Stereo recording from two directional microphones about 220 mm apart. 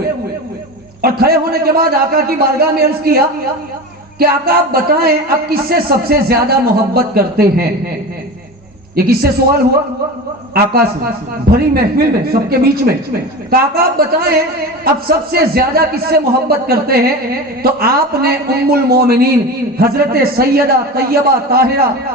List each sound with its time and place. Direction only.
1.0 s a man's voice: 45° right (ahead or behind)
9.0 s a man's voice: 45° right (ahead or behind)
11.5 s a man's voice: 45° right (ahead or behind)